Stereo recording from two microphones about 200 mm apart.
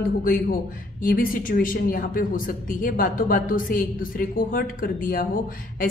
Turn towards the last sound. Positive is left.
turn(degrees=45)  # may be behind; listen again after turning